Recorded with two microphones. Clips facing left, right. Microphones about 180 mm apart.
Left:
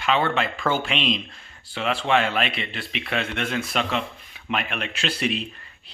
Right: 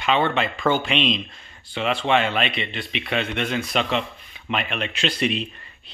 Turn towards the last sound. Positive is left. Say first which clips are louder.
# right 2 dB
turn(degrees=5)  # may be behind; listen again after turning